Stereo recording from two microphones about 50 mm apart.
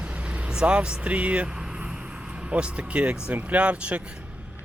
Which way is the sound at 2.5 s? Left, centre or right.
Right.